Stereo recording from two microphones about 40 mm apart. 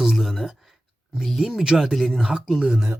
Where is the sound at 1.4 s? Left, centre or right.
Centre.